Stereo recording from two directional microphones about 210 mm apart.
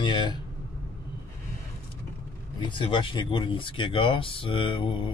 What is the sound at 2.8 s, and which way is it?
Speech, 25° left (ahead or behind).